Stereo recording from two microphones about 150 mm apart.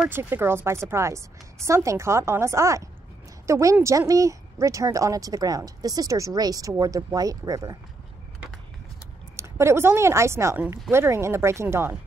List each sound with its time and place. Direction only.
0.1 s speech: 15° right (ahead or behind)
9.4 s speech: 20° right (ahead or behind)